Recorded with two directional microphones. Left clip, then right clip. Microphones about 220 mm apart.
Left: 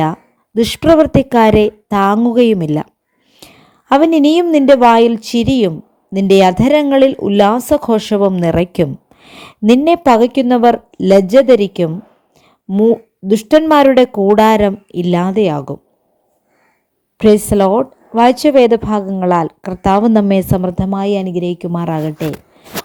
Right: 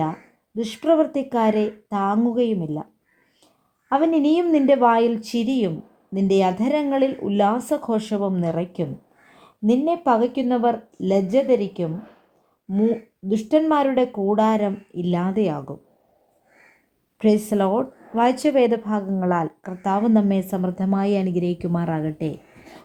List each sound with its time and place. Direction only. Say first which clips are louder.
0.0 s a woman's voice: left 9 dB; 40° left (ahead or behind)
3.4 s a sound: left 19 dB; 45° left (ahead or behind)
4.5 s a woman's voice: left 9 dB; 35° left (ahead or behind)
17.2 s a woman's voice: left 10 dB; 30° left (ahead or behind)